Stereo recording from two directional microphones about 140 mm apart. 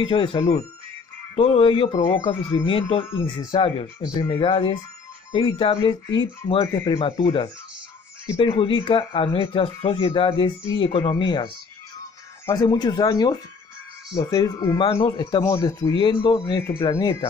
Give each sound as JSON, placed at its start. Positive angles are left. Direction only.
{"t": 0.0, "sound": "speech", "side_deg": 35}
{"t": 1.9, "sound": "a man's voice", "side_deg": 25}
{"t": 2.2, "sound": "speech", "side_deg": 40}
{"t": 12.4, "sound": "a man's voice", "side_deg": 25}